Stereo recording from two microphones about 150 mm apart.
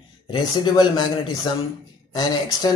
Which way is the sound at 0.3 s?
35° left (ahead or behind).